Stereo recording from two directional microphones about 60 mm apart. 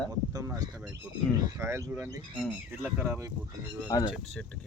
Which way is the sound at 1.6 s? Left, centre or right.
Right.